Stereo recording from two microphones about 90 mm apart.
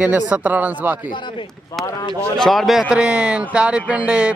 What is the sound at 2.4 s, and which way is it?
Speech, centre (ahead or behind).